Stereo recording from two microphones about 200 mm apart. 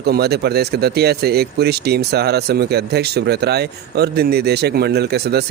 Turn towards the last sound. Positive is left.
turn(degrees=-55)  # may be behind; listen again after turning